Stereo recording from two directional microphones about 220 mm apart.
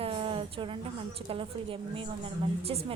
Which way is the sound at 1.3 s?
25° right (ahead or behind).